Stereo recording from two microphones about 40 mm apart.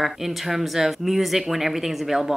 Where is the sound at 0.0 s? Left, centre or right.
Centre.